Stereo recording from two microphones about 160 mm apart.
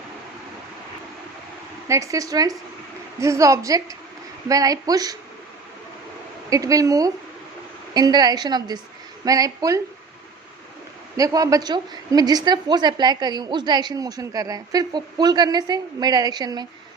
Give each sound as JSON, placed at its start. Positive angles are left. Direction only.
{"t": 1.9, "sound": "a woman's voice", "side_deg": -20}
{"t": 6.5, "sound": "a woman's voice", "side_deg": -20}
{"t": 11.2, "sound": "a woman's voice", "side_deg": -20}